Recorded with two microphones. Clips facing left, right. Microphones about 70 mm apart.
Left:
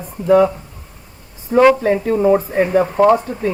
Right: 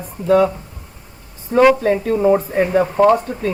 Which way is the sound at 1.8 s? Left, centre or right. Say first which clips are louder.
Left 1 dB; centre.